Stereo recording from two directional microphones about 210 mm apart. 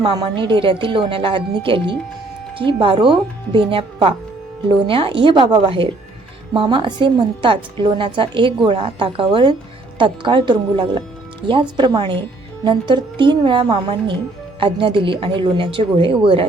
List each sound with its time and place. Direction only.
0.0 s a woman's voice: 20° right (ahead or behind)